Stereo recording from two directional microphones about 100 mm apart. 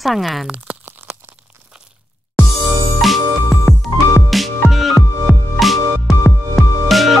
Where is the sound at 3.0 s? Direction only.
Centre (ahead or behind).